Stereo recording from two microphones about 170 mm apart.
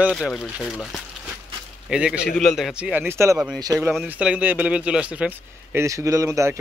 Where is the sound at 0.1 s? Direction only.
5° left (ahead or behind).